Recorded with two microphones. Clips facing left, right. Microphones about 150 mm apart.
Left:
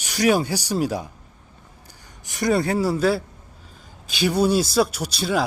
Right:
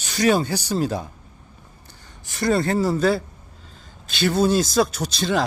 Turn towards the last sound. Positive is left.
turn(degrees=5)  # may be behind; listen again after turning